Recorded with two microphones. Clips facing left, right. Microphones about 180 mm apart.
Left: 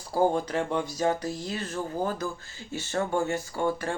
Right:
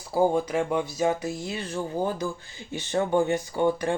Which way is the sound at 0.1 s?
10° right (ahead or behind).